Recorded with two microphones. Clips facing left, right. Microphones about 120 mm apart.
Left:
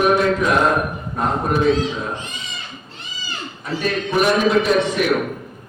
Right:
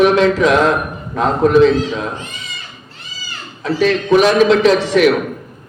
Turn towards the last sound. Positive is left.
turn(degrees=-90)